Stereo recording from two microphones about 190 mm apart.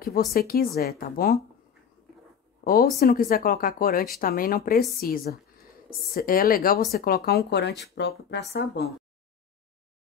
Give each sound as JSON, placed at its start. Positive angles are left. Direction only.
{"t": 0.2, "sound": "speech", "side_deg": 50}
{"t": 2.6, "sound": "speech", "side_deg": 50}